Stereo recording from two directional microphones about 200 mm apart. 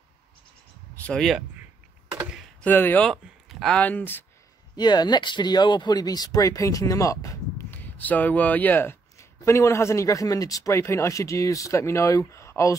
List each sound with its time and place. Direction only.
1.0 s speech: centre (ahead or behind)
4.7 s speech: 20° left (ahead or behind)